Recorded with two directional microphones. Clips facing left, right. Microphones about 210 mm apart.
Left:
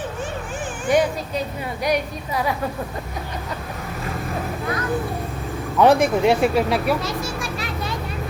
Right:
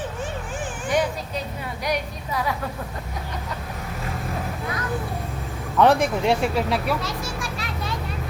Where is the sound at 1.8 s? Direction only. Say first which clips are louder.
Left 5 dB; 10° left (ahead or behind).